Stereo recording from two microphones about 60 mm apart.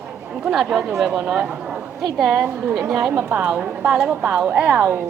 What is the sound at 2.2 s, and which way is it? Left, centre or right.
Speech, centre.